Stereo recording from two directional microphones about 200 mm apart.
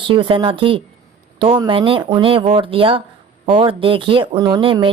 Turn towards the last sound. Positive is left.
turn(degrees=-25)  # may be behind; listen again after turning